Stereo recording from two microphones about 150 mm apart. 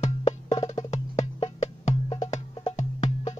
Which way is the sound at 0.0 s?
50° left (ahead or behind).